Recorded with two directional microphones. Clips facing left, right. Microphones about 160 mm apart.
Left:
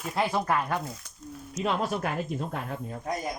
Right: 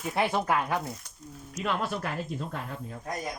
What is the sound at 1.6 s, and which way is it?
Speech, 40° left (ahead or behind).